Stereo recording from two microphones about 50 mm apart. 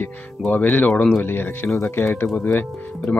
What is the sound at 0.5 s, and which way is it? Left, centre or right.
Speech, left.